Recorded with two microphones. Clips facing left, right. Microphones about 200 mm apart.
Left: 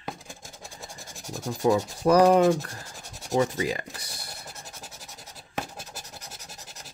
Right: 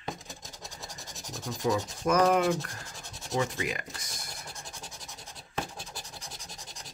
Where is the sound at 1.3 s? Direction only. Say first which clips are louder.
Left 6 dB; 30° left (ahead or behind).